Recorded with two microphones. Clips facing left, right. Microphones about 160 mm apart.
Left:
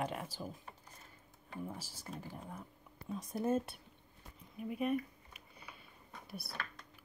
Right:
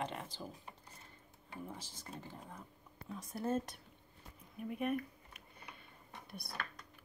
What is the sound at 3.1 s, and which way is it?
Speech, 20° left (ahead or behind).